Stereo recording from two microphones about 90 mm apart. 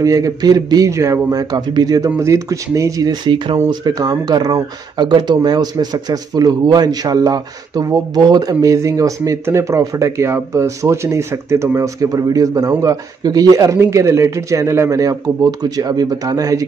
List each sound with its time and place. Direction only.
0.0 s speech: 40° right (ahead or behind)
2.0 s speech: 35° right (ahead or behind)
3.1 s speech: 60° right (ahead or behind)
3.8 s speech: 45° right (ahead or behind)